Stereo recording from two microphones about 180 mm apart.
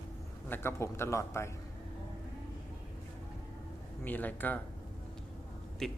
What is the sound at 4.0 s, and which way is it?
Speech, 10° left (ahead or behind).